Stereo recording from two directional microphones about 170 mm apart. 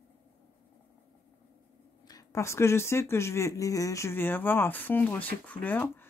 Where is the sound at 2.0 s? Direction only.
20° left (ahead or behind).